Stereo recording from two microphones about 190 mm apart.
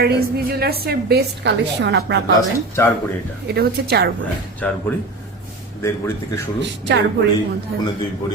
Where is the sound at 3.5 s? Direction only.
55° right (ahead or behind).